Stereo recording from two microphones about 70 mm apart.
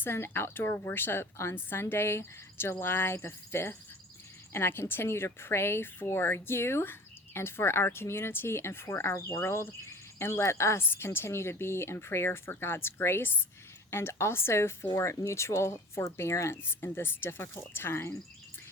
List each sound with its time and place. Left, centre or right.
0.0 s speech: left